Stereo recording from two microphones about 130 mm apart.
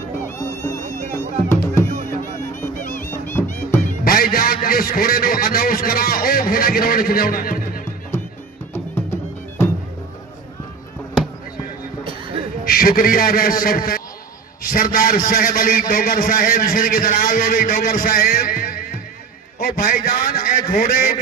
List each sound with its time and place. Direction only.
0.3 s music: 20° left (ahead or behind)
3.1 s music: 20° left (ahead or behind)
4.0 s a sound: 90° left
5.3 s a man's voice: 90° left
8.7 s music: 15° left (ahead or behind)
12.8 s a man's voice: 90° left
14.6 s a sound: 90° left
14.9 s a man's voice: 90° left